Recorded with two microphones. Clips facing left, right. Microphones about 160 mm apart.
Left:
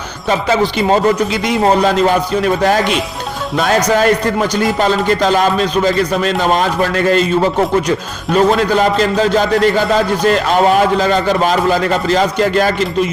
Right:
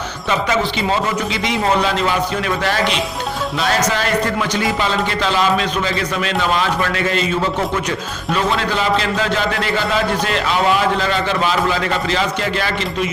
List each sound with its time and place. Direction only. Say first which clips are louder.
0.3 s speech: left 4 dB; 30° left (ahead or behind)
0.8 s a man's voice: left 7 dB; 50° left (ahead or behind)
3.9 s a man's voice: left 6 dB; 45° left (ahead or behind)
8.4 s a man's voice: left 8 dB; 45° left (ahead or behind)